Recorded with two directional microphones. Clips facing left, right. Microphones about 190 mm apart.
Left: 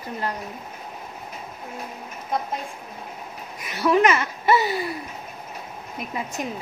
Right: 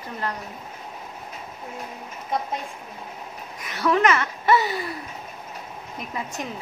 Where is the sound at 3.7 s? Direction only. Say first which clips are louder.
Left 2 dB; 10° left (ahead or behind).